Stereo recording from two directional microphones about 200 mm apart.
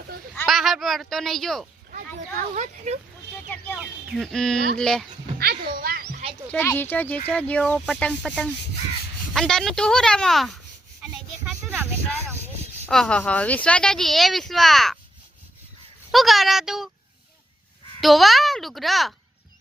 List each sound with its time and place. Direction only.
0.4 s speech: centre (ahead or behind)
2.6 s speech: 35° right (ahead or behind)
3.8 s speech: centre (ahead or behind)
5.4 s a sound: 50° right (ahead or behind)
6.5 s speech: 10° left (ahead or behind)
11.0 s a sound: 5° right (ahead or behind)
12.8 s speech: 5° left (ahead or behind)
16.1 s speech: centre (ahead or behind)
18.0 s speech: centre (ahead or behind)